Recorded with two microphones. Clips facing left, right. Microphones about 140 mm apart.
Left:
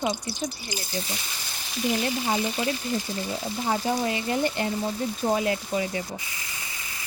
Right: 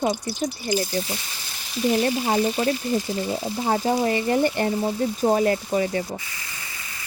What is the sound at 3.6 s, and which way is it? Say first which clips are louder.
Speech: right 4 dB; 45° right (ahead or behind).